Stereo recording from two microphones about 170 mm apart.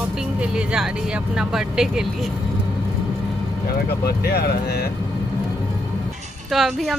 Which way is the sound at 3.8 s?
70° left (ahead or behind).